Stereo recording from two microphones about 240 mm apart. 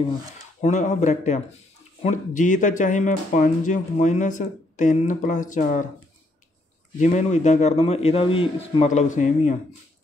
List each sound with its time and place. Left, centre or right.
0.6 s a man's voice: left
7.0 s a man's voice: left